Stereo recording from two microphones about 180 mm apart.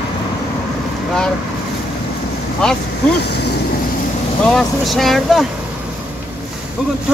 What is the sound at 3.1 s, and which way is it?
Speech, 65° left (ahead or behind).